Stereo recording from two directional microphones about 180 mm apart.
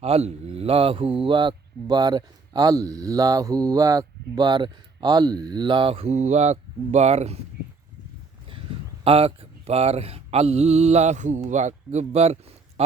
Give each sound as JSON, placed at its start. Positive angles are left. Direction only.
{"t": 0.0, "sound": "speech", "side_deg": -35}
{"t": 9.0, "sound": "speech", "side_deg": -30}